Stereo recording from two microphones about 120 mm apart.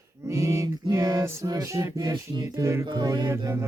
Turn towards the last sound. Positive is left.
turn(degrees=-30)  # may be behind; listen again after turning